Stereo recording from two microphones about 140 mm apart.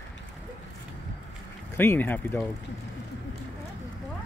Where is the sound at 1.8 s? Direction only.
15° left (ahead or behind).